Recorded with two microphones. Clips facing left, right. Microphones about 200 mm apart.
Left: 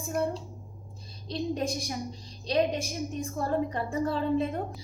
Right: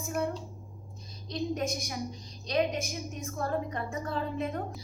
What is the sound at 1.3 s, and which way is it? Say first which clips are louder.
A woman's voice: left 1 dB; 30° left (ahead or behind).